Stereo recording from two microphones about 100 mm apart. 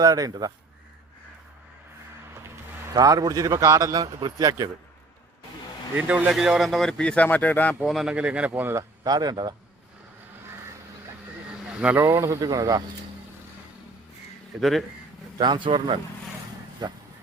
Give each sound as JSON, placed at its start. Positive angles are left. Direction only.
{"t": 0.0, "sound": "a man's voice", "side_deg": -40}
{"t": 2.9, "sound": "a man's voice", "side_deg": -40}
{"t": 6.0, "sound": "speech", "side_deg": -15}
{"t": 7.8, "sound": "speech", "side_deg": -5}
{"t": 9.0, "sound": "speech", "side_deg": -45}
{"t": 11.7, "sound": "speech", "side_deg": -10}
{"t": 11.9, "sound": "a man's voice", "side_deg": -30}
{"t": 14.6, "sound": "speech", "side_deg": 0}
{"t": 15.4, "sound": "speech", "side_deg": -50}